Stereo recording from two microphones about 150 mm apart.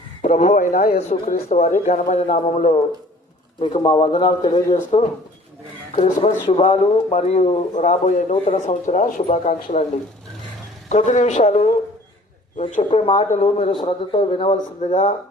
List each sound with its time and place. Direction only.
0.2 s speech: 55° left (ahead or behind)
0.9 s speech: 45° left (ahead or behind)
3.6 s a man's voice: 35° left (ahead or behind)
6.5 s speech: 45° left (ahead or behind)
10.8 s a man's voice: 55° left (ahead or behind)